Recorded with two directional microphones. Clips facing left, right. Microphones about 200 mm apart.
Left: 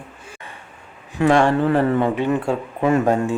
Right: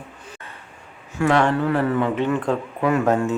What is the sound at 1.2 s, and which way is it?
Speech, 25° left (ahead or behind).